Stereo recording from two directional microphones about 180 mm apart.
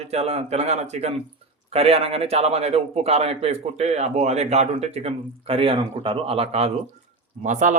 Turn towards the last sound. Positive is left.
turn(degrees=-45)  # may be behind; listen again after turning